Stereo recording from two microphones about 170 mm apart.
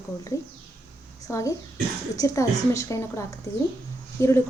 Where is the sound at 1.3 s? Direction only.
15° left (ahead or behind).